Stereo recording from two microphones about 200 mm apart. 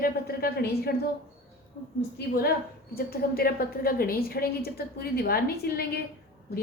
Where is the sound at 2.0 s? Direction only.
50° left (ahead or behind).